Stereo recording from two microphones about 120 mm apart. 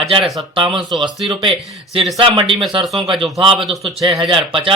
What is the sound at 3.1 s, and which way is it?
A man's voice, centre (ahead or behind).